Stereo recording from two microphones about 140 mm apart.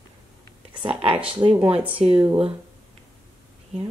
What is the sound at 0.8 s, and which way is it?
Speech, 40° right (ahead or behind).